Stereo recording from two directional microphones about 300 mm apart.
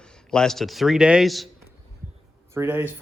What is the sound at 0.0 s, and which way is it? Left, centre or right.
A man's voice, centre.